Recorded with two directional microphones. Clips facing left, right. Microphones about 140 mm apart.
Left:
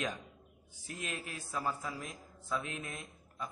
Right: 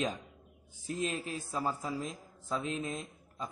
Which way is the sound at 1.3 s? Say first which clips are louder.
Right 3 dB; 30° right (ahead or behind).